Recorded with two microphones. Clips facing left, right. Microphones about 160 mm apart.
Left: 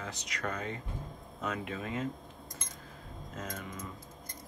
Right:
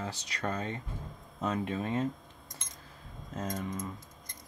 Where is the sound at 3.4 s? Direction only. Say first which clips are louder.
Right 6 dB; 35° right (ahead or behind).